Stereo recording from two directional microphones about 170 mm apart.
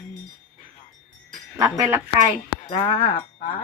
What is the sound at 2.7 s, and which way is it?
Livestock, 40° left (ahead or behind).